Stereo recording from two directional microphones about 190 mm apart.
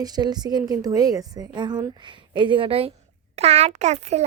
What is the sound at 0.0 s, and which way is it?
A woman's voice, 20° right (ahead or behind).